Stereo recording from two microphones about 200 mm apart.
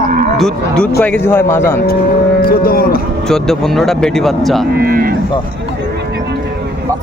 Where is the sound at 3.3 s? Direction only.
Centre (ahead or behind).